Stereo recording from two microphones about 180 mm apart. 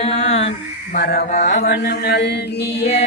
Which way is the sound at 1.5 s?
70° left (ahead or behind).